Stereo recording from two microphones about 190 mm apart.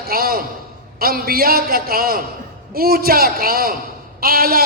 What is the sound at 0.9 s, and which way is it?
A man's voice, 50° right (ahead or behind).